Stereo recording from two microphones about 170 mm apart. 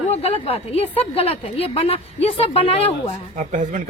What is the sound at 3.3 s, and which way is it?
Speech, 50° right (ahead or behind).